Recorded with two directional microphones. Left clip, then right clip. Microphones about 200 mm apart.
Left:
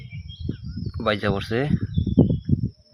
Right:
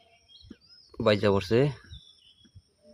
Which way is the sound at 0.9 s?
20° right (ahead or behind).